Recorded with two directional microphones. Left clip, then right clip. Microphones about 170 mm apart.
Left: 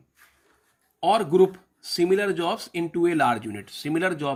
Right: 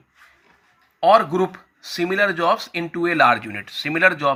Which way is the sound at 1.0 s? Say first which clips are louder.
Right 4 dB; 25° left (ahead or behind).